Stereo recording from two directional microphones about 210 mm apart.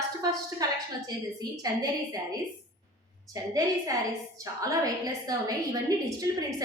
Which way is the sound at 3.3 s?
15° right (ahead or behind).